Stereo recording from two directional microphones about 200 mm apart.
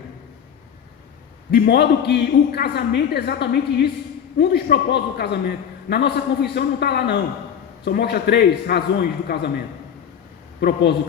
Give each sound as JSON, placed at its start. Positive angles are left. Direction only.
{"t": 1.5, "sound": "a man's voice", "side_deg": 55}
{"t": 10.6, "sound": "a man's voice", "side_deg": 50}